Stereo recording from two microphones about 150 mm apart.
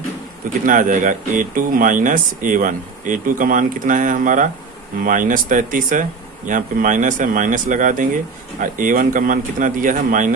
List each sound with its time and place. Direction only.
0.6 s speech: 60° right (ahead or behind)